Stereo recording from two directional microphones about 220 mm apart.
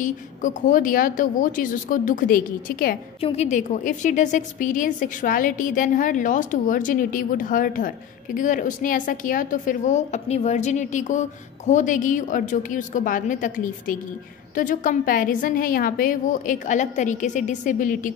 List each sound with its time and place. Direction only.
0.0 s a woman's voice: 35° left (ahead or behind)
3.2 s a woman's voice: 25° left (ahead or behind)